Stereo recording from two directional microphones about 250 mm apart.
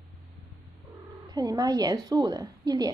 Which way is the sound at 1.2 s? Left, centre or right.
Centre.